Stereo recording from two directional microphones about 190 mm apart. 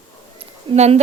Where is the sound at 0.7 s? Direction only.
35° right (ahead or behind).